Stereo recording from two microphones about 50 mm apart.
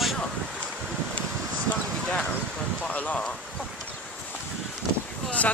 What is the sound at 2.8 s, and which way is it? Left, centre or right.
Speech, left.